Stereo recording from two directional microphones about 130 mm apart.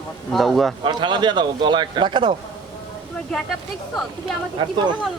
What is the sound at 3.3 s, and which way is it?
Speech, 5° left (ahead or behind).